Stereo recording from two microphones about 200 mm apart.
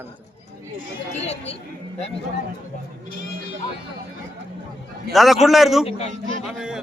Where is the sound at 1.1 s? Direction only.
30° left (ahead or behind).